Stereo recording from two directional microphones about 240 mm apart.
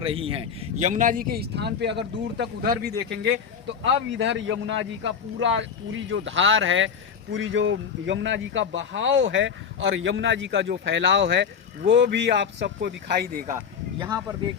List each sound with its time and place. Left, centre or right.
0.0 s speech: right
4.1 s speech: right
14.0 s speech: centre